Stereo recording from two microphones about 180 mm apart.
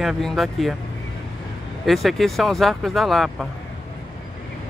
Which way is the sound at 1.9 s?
Centre (ahead or behind).